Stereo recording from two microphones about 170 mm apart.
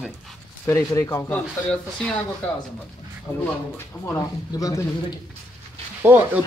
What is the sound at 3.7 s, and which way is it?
Speech, 15° left (ahead or behind).